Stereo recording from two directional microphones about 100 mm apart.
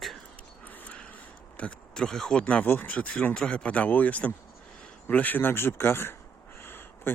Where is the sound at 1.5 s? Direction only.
10° left (ahead or behind).